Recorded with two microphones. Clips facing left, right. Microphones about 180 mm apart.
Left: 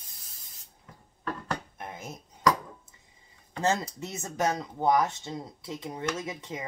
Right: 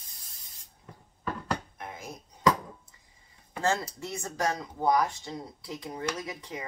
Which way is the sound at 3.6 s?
20° left (ahead or behind).